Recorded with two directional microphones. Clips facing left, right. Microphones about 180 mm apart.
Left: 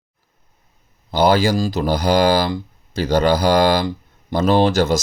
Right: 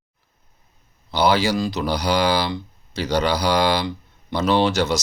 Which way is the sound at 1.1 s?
50° left (ahead or behind).